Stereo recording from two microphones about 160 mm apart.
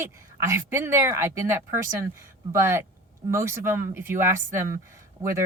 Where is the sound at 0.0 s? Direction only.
15° right (ahead or behind).